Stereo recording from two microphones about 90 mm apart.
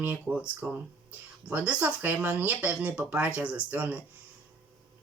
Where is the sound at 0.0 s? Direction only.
15° right (ahead or behind).